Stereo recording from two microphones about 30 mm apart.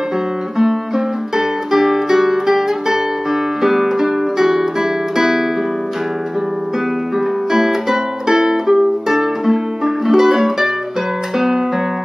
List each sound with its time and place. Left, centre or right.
0.6 s music: centre
7.5 s music: centre